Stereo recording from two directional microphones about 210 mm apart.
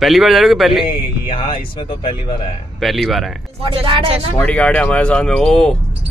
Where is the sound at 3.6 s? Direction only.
25° right (ahead or behind).